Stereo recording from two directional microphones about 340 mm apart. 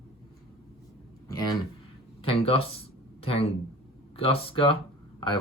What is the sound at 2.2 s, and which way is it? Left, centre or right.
Speech, centre.